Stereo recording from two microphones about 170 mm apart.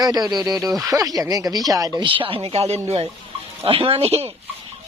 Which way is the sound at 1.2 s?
20° right (ahead or behind).